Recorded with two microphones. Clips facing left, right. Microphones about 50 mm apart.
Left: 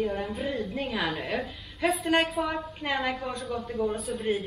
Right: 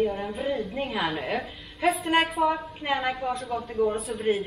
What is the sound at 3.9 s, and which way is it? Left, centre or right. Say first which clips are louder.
Speech: right 2 dB; centre.